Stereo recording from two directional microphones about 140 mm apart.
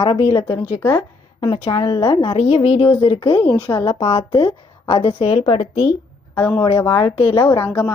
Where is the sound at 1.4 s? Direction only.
30° left (ahead or behind).